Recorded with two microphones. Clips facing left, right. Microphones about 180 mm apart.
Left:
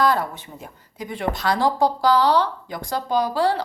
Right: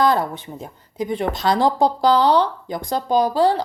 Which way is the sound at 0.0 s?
20° right (ahead or behind).